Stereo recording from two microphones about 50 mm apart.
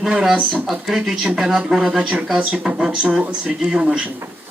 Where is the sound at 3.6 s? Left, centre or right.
Centre.